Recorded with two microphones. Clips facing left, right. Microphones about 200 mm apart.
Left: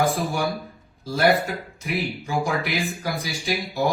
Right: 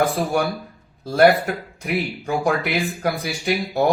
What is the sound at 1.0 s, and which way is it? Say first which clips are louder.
Speech: right 5 dB; 60° right (ahead or behind).